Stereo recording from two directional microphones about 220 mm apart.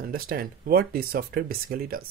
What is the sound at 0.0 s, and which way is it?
Speech, 40° right (ahead or behind).